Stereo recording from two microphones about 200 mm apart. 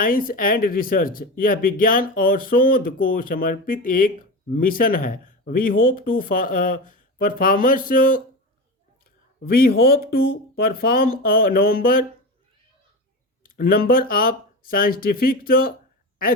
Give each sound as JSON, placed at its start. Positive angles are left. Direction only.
{"t": 0.0, "sound": "speech", "side_deg": 45}
{"t": 9.4, "sound": "speech", "side_deg": 50}
{"t": 13.4, "sound": "speech", "side_deg": 45}